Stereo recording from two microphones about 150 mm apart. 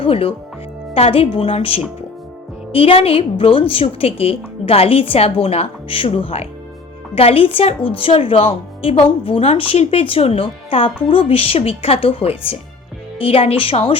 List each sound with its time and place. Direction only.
0.0 s a woman's voice: 40° left (ahead or behind)